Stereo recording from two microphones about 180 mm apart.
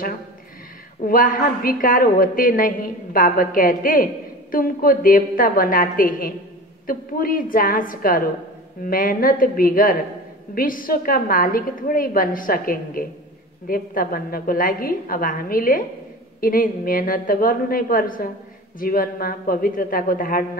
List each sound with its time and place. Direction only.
1.0 s a woman's voice: 50° left (ahead or behind)